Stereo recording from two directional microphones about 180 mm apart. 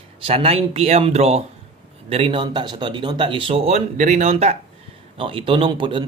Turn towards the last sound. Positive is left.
turn(degrees=-25)  # may be behind; listen again after turning